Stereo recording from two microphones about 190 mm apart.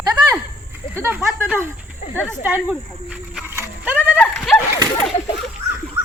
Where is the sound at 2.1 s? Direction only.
5° left (ahead or behind).